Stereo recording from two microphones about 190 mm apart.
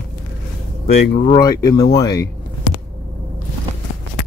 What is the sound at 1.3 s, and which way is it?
Speech, 20° left (ahead or behind).